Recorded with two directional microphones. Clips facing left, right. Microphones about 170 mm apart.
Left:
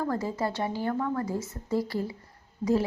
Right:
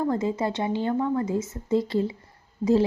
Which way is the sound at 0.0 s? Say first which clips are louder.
Right 4 dB; 20° right (ahead or behind).